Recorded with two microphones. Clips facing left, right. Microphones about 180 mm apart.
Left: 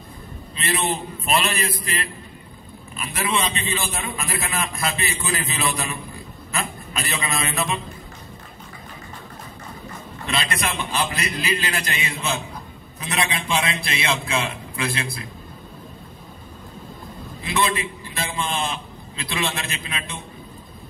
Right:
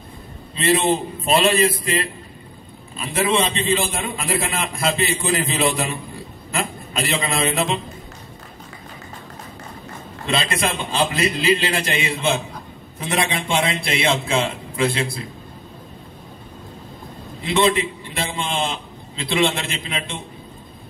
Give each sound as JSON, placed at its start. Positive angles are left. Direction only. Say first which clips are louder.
{"t": 0.6, "sound": "a man's voice", "louder": "right 7 dB", "side_deg": -25}
{"t": 3.0, "sound": "a man's voice", "louder": "right 5 dB", "side_deg": -25}
{"t": 10.2, "sound": "a man's voice", "louder": "right 4 dB", "side_deg": -25}
{"t": 13.8, "sound": "a man's voice", "louder": "right 5 dB", "side_deg": -25}
{"t": 17.5, "sound": "a man's voice", "louder": "right 5 dB", "side_deg": -20}